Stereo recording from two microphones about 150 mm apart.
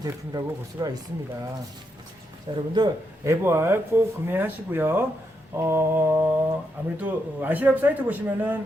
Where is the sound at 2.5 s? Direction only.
25° right (ahead or behind).